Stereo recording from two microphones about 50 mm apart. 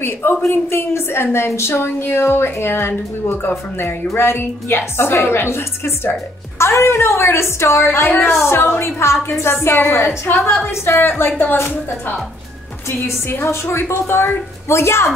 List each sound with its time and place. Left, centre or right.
0.0 s a woman's voice: left
13.5 s speech: left